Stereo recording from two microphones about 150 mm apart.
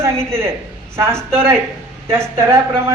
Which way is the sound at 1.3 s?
15° right (ahead or behind).